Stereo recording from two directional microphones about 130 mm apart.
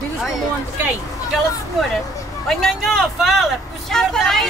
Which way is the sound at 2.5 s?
Centre (ahead or behind).